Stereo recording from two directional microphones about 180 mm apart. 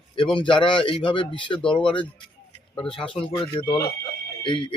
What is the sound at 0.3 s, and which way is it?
Speech, 25° left (ahead or behind).